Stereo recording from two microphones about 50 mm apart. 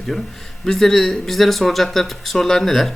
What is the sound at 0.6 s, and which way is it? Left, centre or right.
Speech, centre.